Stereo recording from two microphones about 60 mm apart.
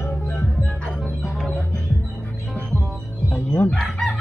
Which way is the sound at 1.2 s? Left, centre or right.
Centre.